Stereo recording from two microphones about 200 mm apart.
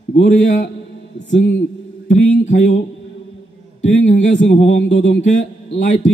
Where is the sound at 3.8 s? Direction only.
35° left (ahead or behind).